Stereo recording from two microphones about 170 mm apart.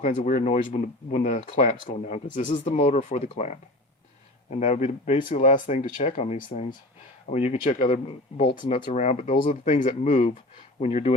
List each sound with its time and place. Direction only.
0.0 s speech: 45° left (ahead or behind)
2.5 s speech: 35° left (ahead or behind)